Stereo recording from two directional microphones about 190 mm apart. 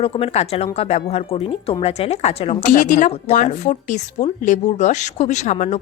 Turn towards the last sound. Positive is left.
turn(degrees=40)  # may be behind; listen again after turning